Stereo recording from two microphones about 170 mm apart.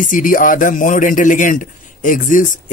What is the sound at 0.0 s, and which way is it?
Speech, 50° left (ahead or behind).